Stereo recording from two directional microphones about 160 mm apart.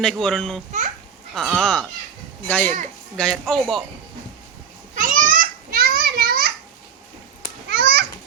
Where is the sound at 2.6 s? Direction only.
50° right (ahead or behind).